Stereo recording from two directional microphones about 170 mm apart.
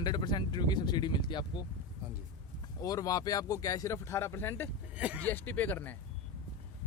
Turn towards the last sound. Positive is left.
turn(degrees=10)  # may be behind; listen again after turning